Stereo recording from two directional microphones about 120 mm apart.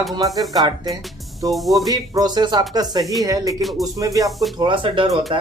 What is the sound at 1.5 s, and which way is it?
Speech, centre (ahead or behind).